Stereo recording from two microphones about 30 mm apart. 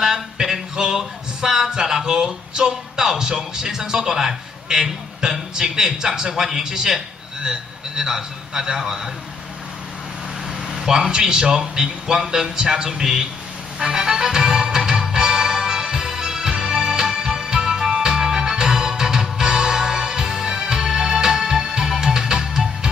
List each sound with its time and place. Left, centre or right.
0.0 s a sound: centre
7.4 s a man's voice: centre
10.7 s a man's voice: centre
13.7 s music: right